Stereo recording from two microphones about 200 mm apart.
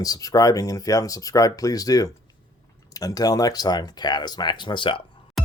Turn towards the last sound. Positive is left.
turn(degrees=25)  # may be behind; listen again after turning